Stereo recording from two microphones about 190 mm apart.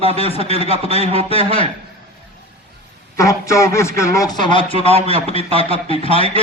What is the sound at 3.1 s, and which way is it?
A man's voice, 15° left (ahead or behind).